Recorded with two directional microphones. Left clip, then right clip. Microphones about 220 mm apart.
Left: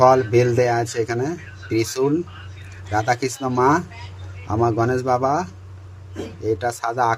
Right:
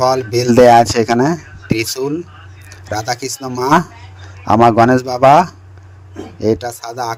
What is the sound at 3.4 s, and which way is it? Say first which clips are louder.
Speech: left 1 dB; centre (ahead or behind).